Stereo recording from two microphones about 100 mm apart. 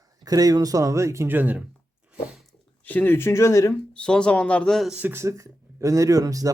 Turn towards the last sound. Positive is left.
turn(degrees=-35)  # may be behind; listen again after turning